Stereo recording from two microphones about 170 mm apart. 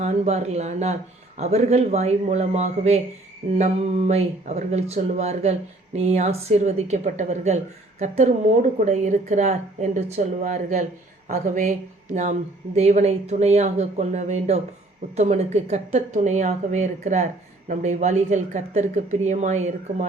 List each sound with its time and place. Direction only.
0.0 s a woman's voice: 40° right (ahead or behind)